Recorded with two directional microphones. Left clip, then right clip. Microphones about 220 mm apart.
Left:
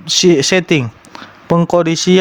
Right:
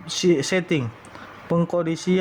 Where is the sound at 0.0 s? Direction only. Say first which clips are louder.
Left 10 dB; 35° left (ahead or behind).